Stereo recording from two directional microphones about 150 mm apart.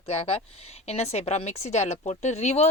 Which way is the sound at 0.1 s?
40° left (ahead or behind).